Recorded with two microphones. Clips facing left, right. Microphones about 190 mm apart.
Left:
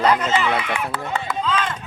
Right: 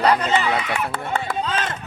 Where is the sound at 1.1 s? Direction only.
35° right (ahead or behind).